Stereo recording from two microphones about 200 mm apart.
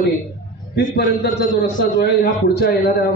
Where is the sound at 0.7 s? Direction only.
55° left (ahead or behind).